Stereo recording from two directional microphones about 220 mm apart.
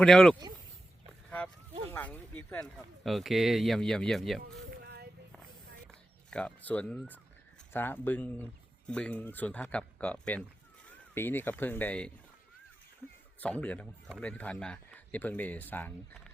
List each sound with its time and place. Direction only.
0.0 s speech: 5° left (ahead or behind)
1.9 s speech: 10° left (ahead or behind)
4.8 s a sound: 45° right (ahead or behind)
6.3 s speech: 5° left (ahead or behind)
13.4 s speech: 5° left (ahead or behind)